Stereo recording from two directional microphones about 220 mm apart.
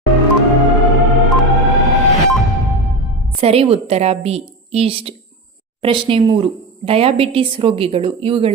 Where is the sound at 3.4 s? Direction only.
25° right (ahead or behind).